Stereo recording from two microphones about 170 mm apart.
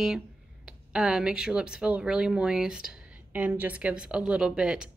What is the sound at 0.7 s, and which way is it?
Speech, 5° right (ahead or behind).